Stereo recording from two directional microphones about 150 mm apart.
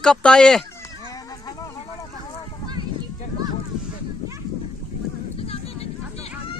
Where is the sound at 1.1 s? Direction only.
25° left (ahead or behind).